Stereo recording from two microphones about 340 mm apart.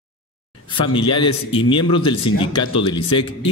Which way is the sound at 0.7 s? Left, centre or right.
Centre.